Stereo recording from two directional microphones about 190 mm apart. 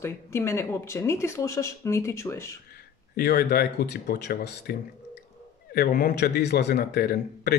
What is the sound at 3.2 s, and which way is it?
A man's voice, 55° left (ahead or behind).